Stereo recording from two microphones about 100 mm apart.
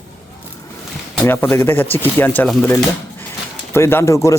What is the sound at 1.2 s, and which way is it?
Speech, 20° left (ahead or behind).